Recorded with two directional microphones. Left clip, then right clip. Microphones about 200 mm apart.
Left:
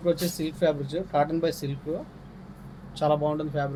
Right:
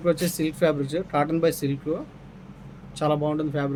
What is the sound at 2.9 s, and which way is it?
Speech, 50° right (ahead or behind).